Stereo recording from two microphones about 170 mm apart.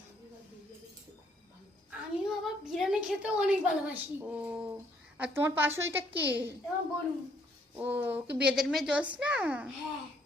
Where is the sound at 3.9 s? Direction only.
10° right (ahead or behind).